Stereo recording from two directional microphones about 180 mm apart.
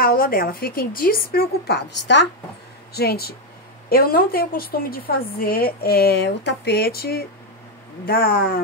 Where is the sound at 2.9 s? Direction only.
60° left (ahead or behind).